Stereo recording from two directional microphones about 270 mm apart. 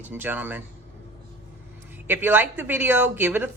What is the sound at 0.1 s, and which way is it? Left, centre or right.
Speech, centre.